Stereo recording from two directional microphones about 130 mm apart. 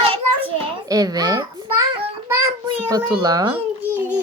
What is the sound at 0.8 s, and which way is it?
Speech, 30° right (ahead or behind).